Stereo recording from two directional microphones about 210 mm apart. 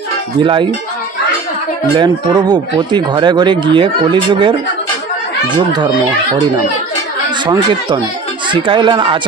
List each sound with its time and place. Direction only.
0.4 s speech: 25° right (ahead or behind)
2.0 s speech: 20° right (ahead or behind)
8.5 s speech: 20° right (ahead or behind)